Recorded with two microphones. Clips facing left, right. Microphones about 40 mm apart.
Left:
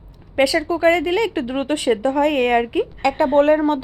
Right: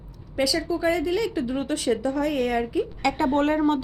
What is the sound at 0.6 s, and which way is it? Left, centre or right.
A woman's voice, left.